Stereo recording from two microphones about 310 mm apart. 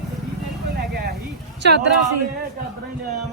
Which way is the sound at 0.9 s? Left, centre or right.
Right.